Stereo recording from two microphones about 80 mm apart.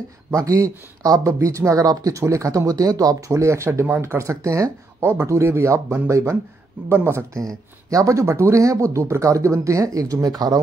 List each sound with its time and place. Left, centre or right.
0.3 s speech: right
7.4 s speech: right